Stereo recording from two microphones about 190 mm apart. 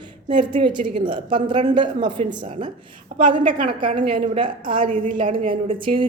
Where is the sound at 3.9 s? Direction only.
25° right (ahead or behind).